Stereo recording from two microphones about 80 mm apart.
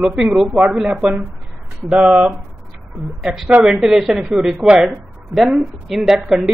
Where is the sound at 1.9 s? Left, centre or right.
Centre.